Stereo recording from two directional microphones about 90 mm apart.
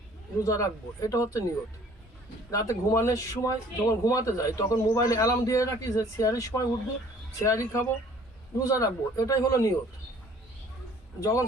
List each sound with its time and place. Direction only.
0.4 s speech: 35° left (ahead or behind)
2.5 s speech: 35° left (ahead or behind)
11.2 s speech: 35° left (ahead or behind)